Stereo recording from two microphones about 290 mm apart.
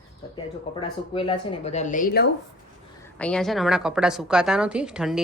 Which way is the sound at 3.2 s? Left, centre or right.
Centre.